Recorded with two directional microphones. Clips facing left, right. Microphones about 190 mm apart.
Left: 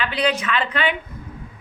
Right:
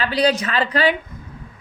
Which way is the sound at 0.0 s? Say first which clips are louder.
Right 3 dB; 35° right (ahead or behind).